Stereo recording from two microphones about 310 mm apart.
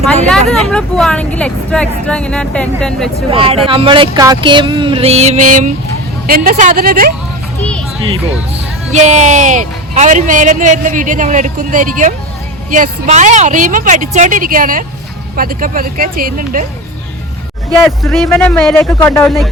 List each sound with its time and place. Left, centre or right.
0.0 s speech: centre
3.3 s music: centre
6.2 s speech: right
8.9 s speech: right
18.0 s speech: centre